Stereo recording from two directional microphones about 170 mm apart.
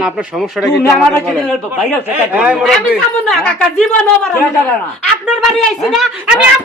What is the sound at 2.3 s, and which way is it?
A man's voice, 5° right (ahead or behind).